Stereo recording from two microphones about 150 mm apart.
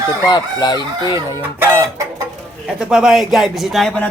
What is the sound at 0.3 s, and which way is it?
Speech, 30° left (ahead or behind).